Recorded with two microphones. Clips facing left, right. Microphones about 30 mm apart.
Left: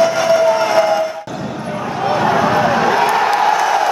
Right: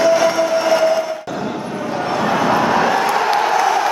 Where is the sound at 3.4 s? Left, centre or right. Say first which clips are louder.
Left 2 dB; centre.